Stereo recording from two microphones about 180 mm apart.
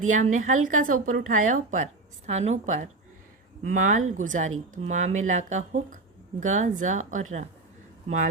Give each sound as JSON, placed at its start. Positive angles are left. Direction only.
{"t": 0.0, "sound": "speech", "side_deg": -45}